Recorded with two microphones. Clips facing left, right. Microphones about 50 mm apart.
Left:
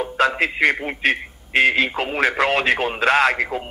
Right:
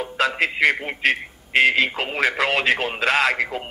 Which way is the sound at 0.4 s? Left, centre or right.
Left.